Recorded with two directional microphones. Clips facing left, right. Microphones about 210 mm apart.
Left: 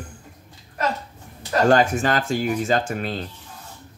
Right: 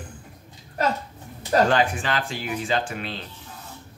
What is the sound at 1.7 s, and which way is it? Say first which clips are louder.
Speech: left 5 dB; 45° left (ahead or behind).